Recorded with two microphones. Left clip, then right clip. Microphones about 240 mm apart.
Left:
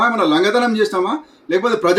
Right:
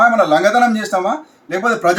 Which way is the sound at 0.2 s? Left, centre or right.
Centre.